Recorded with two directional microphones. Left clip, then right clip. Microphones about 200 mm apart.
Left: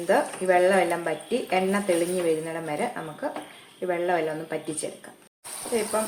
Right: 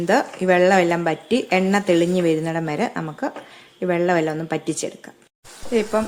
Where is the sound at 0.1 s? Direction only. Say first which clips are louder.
Right 3 dB; 55° right (ahead or behind).